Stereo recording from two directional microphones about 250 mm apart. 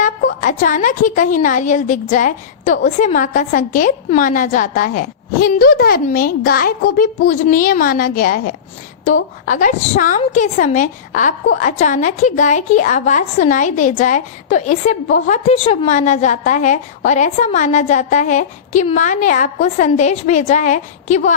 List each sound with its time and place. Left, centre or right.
0.0 s a woman's voice: left